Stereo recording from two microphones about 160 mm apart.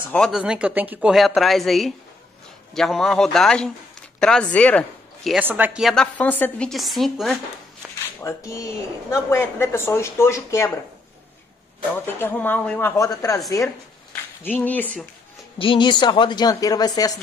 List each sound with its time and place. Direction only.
0.1 s a woman's voice: centre (ahead or behind)
5.3 s a woman's voice: 10° right (ahead or behind)
8.2 s speech: 20° left (ahead or behind)
11.9 s speech: 10° left (ahead or behind)
14.4 s speech: 10° left (ahead or behind)
15.6 s speech: 30° left (ahead or behind)